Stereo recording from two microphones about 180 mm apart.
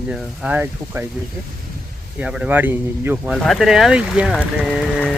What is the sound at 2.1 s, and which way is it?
Speech, 5° right (ahead or behind).